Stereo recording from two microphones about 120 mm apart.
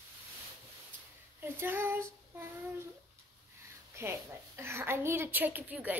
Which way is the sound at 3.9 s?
20° right (ahead or behind).